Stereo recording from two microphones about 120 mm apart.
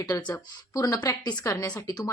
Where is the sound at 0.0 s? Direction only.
35° left (ahead or behind).